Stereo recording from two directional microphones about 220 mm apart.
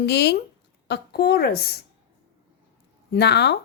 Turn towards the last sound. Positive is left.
turn(degrees=50)  # may be behind; listen again after turning